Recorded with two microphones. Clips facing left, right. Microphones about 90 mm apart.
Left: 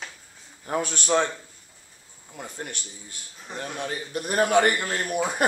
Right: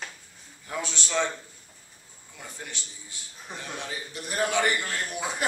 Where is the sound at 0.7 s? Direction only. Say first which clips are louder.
Left 8 dB; 50° left (ahead or behind).